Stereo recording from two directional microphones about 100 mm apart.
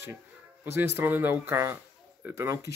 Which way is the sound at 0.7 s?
20° right (ahead or behind).